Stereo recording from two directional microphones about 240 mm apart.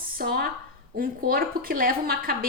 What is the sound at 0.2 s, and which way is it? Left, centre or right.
A woman's voice, right.